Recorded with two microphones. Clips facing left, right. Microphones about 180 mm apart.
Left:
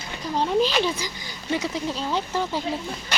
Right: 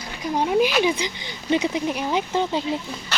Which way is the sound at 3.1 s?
15° left (ahead or behind).